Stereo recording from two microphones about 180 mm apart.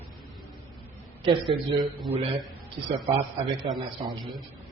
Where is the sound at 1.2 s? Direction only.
25° right (ahead or behind).